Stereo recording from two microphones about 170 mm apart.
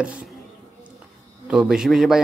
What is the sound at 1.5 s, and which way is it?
Speech, 5° right (ahead or behind).